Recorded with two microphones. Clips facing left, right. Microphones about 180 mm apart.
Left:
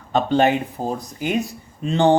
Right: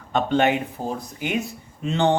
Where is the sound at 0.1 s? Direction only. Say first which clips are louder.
Left 3 dB; 35° left (ahead or behind).